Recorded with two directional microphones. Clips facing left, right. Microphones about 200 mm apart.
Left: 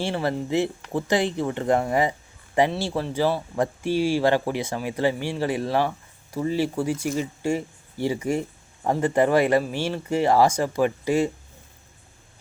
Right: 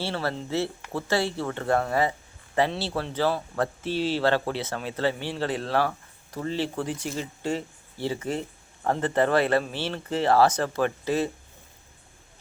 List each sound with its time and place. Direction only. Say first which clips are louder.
0.0 s speech: left 4 dB; 15° left (ahead or behind)